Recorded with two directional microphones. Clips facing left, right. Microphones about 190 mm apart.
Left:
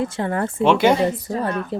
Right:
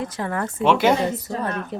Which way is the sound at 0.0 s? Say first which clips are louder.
Left 4 dB; 30° left (ahead or behind).